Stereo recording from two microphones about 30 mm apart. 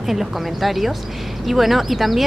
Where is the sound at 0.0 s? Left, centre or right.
Centre.